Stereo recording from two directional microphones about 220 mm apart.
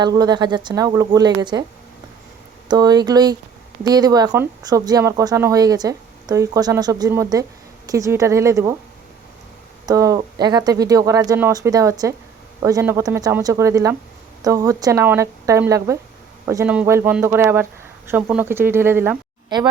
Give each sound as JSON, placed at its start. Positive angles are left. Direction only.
{"t": 0.0, "sound": "speech", "side_deg": -20}
{"t": 2.6, "sound": "speech", "side_deg": -20}
{"t": 9.8, "sound": "speech", "side_deg": -15}